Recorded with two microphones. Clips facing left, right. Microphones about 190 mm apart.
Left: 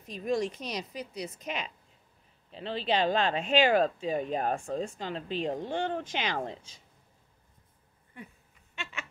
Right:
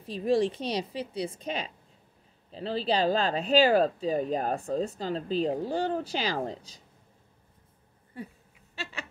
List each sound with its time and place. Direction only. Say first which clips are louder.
0.0 s speech: right 5 dB; 30° right (ahead or behind)
8.2 s speech: right 7 dB; 35° right (ahead or behind)
8.7 s a sound: right 3 dB; 35° right (ahead or behind)